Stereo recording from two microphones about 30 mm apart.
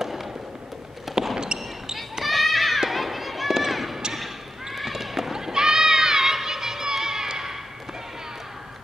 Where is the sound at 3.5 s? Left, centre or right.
Centre.